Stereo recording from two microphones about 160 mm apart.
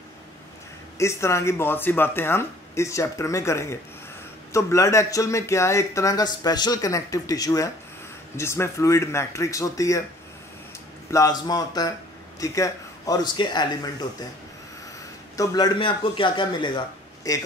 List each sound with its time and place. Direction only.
0.9 s speech: 15° left (ahead or behind)
11.1 s speech: 20° left (ahead or behind)
15.3 s speech: 25° left (ahead or behind)